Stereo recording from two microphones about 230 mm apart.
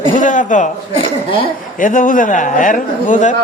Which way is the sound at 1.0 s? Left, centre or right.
Left.